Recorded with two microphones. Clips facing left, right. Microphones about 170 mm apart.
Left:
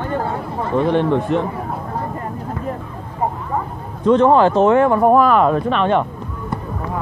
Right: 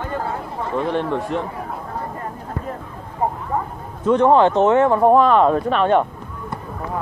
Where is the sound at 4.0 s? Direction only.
15° right (ahead or behind); by 6.0 s 45° right (ahead or behind).